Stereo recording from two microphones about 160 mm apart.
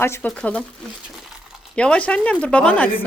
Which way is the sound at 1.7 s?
5° left (ahead or behind).